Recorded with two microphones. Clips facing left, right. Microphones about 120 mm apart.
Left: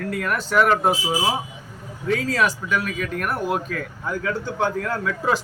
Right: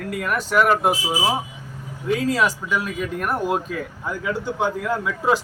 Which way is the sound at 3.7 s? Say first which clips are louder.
Even; 10° right (ahead or behind).